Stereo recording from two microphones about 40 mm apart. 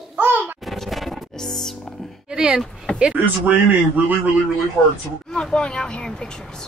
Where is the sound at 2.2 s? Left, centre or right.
Centre.